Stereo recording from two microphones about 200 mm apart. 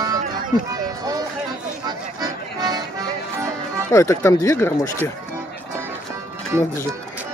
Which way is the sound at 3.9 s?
15° left (ahead or behind).